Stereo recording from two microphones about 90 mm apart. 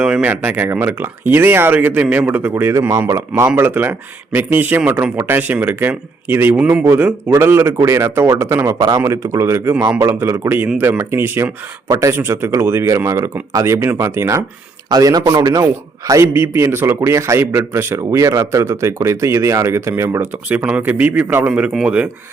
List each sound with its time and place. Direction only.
0.0 s a man's voice: 15° right (ahead or behind)
6.6 s a man's voice: 10° right (ahead or behind); by 14.4 s 35° right (ahead or behind)
14.8 s a man's voice: 45° right (ahead or behind)
16.2 s a man's voice: 25° right (ahead or behind)
21.7 s speech: centre (ahead or behind)